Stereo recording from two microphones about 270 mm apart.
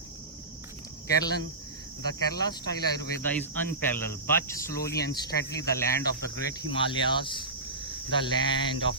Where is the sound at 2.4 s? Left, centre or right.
Centre.